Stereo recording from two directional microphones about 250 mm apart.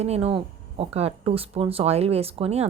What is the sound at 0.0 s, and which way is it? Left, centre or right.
Speech, right.